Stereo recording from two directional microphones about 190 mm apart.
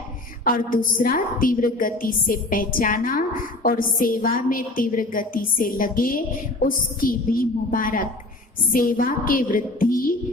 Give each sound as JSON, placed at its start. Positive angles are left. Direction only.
{"t": 0.4, "sound": "a woman's voice", "side_deg": 45}